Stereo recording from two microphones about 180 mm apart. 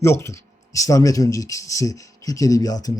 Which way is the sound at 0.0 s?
15° left (ahead or behind).